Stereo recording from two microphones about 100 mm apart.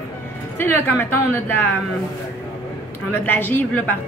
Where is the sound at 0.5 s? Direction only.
20° left (ahead or behind).